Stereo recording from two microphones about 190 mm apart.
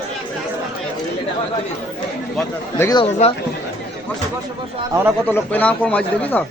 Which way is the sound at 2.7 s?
15° left (ahead or behind).